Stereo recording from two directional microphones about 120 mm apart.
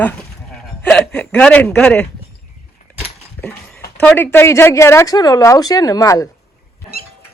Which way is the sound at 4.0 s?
15° left (ahead or behind).